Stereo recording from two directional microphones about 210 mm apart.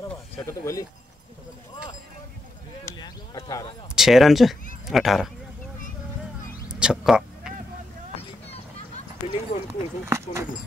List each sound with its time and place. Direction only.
0.4 s speech: 15° left (ahead or behind)
2.8 s clip-clop: 15° left (ahead or behind)
3.9 s speech: centre (ahead or behind)
6.7 s a sound: 5° right (ahead or behind)
8.2 s a sound: 30° left (ahead or behind)
10.0 s speech: 10° right (ahead or behind)